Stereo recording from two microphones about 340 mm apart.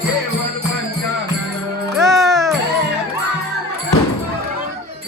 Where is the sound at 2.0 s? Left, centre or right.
Centre.